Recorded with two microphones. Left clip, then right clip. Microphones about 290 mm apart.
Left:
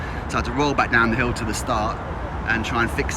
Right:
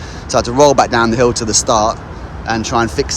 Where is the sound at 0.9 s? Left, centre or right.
Centre.